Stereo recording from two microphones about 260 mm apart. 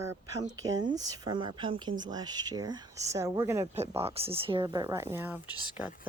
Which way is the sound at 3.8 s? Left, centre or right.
Right.